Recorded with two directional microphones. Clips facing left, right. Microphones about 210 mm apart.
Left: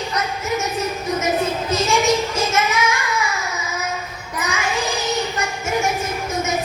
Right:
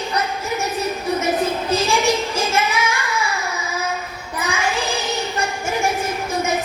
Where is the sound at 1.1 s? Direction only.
30° right (ahead or behind).